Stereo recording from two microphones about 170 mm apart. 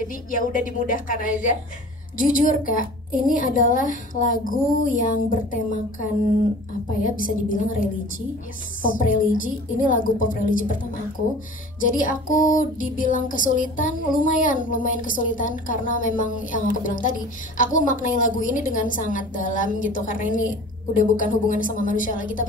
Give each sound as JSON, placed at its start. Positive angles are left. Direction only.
{"t": 0.0, "sound": "a woman's voice", "side_deg": 50}